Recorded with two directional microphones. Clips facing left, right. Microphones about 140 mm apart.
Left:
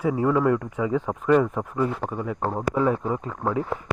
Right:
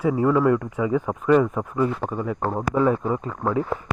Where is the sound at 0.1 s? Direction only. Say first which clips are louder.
Right 2 dB; 25° left (ahead or behind).